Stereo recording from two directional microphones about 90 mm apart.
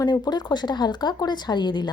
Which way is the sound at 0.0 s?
50° left (ahead or behind).